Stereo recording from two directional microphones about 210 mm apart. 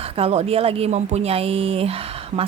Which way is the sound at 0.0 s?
30° right (ahead or behind).